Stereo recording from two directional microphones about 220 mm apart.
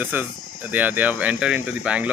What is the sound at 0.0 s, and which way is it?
Speech, 10° right (ahead or behind).